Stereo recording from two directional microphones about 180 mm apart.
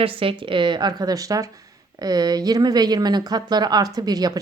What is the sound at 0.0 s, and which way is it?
A woman's voice, 30° right (ahead or behind).